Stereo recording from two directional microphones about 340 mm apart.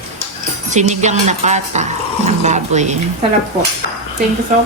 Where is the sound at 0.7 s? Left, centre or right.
Right.